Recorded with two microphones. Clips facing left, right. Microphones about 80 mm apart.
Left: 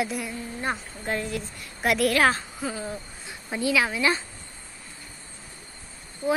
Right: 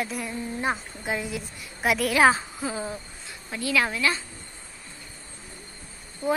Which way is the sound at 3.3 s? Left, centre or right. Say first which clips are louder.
Left 4 dB; left.